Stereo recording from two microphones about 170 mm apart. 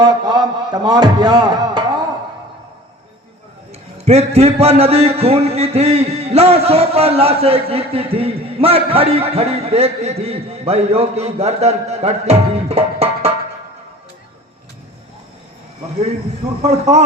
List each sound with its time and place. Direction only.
0.0 s a man's voice: 25° right (ahead or behind)
4.0 s a man's voice: 35° right (ahead or behind)
16.6 s a man's voice: 40° right (ahead or behind)